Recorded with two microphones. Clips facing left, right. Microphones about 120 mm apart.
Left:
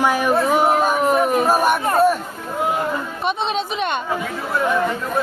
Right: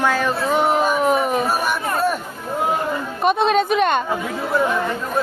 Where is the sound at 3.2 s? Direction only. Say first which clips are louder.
Right 8 dB; 45° right (ahead or behind).